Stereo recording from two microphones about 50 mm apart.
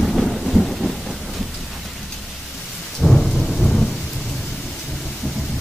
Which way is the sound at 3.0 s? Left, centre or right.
Centre.